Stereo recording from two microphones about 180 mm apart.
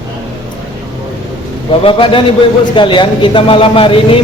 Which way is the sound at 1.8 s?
30° left (ahead or behind).